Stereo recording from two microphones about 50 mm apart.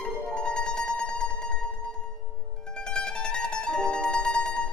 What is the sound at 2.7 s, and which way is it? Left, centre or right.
Mandolin, centre.